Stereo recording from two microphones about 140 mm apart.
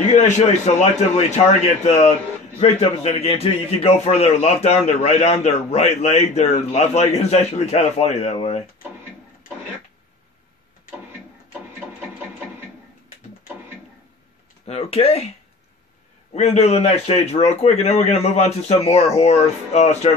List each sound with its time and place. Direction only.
0.1 s a man's voice: 60° left (ahead or behind)
14.7 s a man's voice: 45° left (ahead or behind)
16.3 s a man's voice: 50° left (ahead or behind)